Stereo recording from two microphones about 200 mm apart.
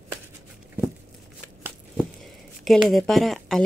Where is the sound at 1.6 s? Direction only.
Centre (ahead or behind).